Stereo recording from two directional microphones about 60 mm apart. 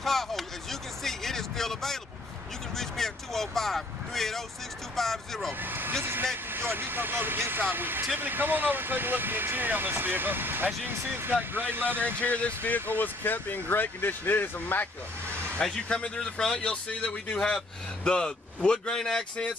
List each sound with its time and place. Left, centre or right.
0.0 s a sound: centre
2.7 s speech: centre
5.5 s speech: right
12.2 s speech: left
15.6 s a man's voice: centre